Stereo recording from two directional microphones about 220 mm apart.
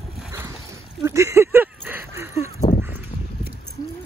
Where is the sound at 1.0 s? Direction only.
15° right (ahead or behind).